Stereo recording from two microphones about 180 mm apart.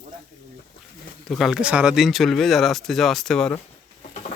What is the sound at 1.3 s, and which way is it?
Speech, centre (ahead or behind).